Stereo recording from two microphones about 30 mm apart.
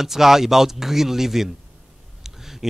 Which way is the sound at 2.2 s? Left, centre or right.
Centre.